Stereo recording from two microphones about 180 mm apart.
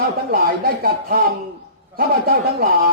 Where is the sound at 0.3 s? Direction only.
55° right (ahead or behind).